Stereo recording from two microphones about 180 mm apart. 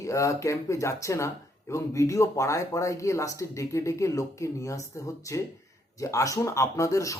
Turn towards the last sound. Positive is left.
turn(degrees=15)  # may be behind; listen again after turning